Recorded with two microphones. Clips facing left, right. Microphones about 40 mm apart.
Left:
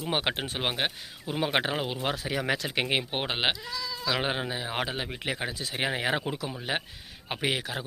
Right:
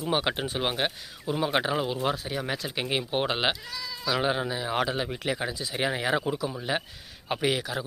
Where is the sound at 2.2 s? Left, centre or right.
Left.